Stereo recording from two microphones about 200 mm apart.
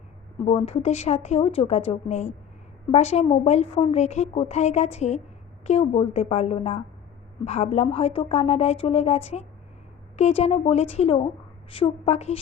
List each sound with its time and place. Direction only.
0.6 s a woman's voice: 30° left (ahead or behind)